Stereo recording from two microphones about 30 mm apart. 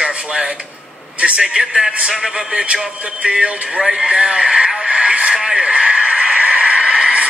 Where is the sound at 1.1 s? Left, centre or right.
Right.